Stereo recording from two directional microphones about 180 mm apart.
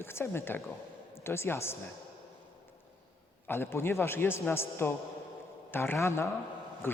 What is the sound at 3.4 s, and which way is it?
A man's voice, 10° left (ahead or behind).